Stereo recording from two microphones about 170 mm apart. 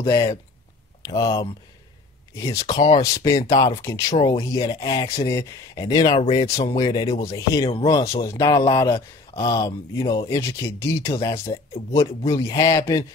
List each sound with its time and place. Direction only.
0.0 s speech: 20° left (ahead or behind)
6.1 s speech: 35° left (ahead or behind)
6.6 s speech: 25° left (ahead or behind)